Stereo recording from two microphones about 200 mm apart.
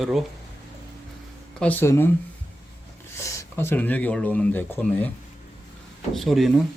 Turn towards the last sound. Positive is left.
turn(degrees=0)  # may be behind; listen again after turning